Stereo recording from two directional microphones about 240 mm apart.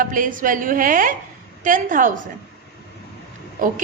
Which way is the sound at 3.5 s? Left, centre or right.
Right.